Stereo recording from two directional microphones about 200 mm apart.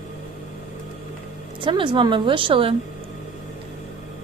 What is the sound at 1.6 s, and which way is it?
A woman's voice, 25° right (ahead or behind).